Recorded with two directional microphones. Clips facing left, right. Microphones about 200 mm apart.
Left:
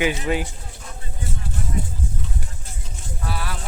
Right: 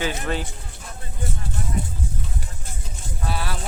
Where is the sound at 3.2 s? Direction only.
25° right (ahead or behind).